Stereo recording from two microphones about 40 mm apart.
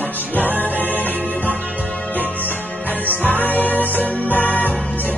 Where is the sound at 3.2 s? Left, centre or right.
Left.